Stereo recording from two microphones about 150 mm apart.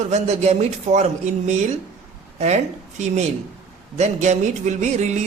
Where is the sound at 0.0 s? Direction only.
50° right (ahead or behind).